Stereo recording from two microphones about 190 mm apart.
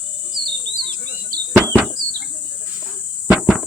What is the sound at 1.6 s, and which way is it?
Bird, 10° right (ahead or behind).